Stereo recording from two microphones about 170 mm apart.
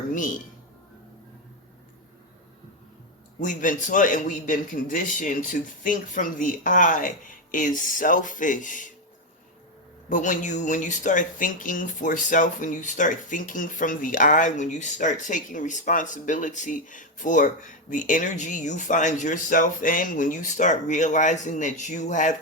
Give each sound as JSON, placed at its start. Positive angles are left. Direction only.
{"t": 0.1, "sound": "speech", "side_deg": 50}
{"t": 3.4, "sound": "speech", "side_deg": 50}
{"t": 10.1, "sound": "speech", "side_deg": 50}